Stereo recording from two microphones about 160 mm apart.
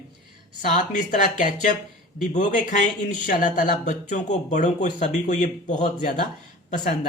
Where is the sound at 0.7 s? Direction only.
50° left (ahead or behind).